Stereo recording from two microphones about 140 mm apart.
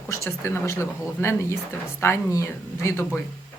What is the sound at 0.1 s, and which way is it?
Speech, 20° left (ahead or behind).